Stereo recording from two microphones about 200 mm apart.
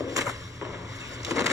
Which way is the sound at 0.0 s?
15° right (ahead or behind).